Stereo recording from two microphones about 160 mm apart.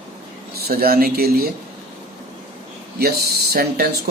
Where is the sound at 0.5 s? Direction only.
70° right (ahead or behind).